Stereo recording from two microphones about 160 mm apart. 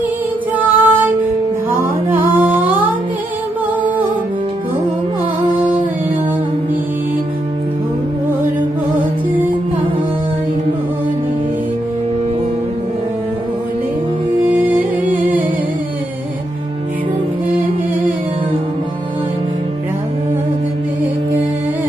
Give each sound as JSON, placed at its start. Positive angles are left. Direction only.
{"t": 0.6, "sound": "music", "side_deg": -10}
{"t": 2.1, "sound": "humming", "side_deg": -35}
{"t": 2.4, "sound": "humming", "side_deg": -10}
{"t": 14.5, "sound": "music", "side_deg": -10}